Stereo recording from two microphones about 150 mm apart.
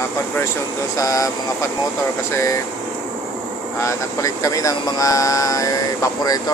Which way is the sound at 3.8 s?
20° left (ahead or behind).